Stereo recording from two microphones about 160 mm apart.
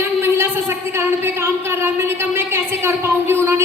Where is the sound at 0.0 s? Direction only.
15° right (ahead or behind).